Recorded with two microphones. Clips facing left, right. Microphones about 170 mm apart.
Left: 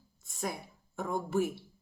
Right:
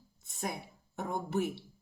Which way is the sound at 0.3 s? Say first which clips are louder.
Left 1 dB; 20° right (ahead or behind).